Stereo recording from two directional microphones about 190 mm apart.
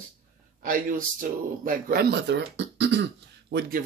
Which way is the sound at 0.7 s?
45° right (ahead or behind).